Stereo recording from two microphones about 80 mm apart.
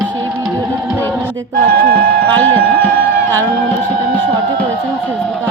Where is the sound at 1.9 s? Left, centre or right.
Left.